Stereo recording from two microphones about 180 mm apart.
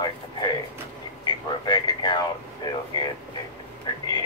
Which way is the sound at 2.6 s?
25° left (ahead or behind).